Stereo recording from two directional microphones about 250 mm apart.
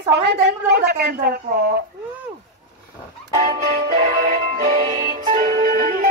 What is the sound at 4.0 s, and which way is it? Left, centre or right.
Music, right.